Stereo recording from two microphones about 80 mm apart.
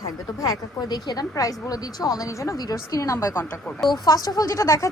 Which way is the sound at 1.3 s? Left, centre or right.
Left.